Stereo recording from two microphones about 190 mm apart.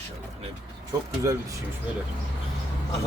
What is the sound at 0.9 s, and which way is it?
Speech, 20° right (ahead or behind).